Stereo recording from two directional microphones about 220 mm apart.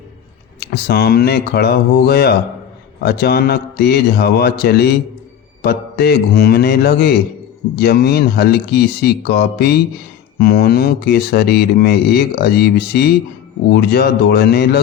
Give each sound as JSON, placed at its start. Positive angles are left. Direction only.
{"t": 0.6, "sound": "speech", "side_deg": 45}